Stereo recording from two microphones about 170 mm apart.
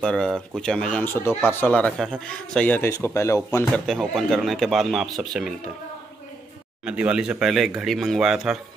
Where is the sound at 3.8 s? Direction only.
Centre (ahead or behind).